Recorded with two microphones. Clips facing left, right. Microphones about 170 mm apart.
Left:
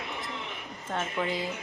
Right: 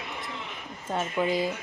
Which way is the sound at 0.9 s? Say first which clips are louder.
Right 4 dB; 10° right (ahead or behind).